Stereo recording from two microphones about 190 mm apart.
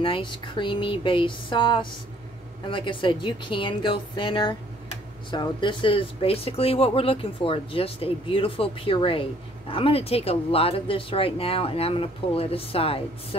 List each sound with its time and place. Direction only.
0.0 s speech: 25° left (ahead or behind)